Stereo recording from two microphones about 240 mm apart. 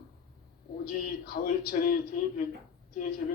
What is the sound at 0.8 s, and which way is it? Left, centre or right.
A man's voice, left.